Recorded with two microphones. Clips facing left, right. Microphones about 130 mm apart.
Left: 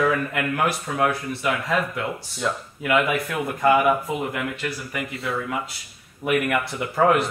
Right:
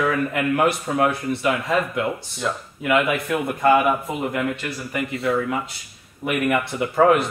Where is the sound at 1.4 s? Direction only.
Centre (ahead or behind).